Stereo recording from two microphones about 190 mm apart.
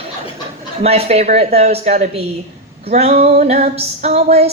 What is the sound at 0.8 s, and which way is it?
Music, 35° right (ahead or behind).